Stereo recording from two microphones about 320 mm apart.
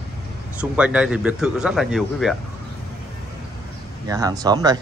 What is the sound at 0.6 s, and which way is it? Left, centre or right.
Speech, centre.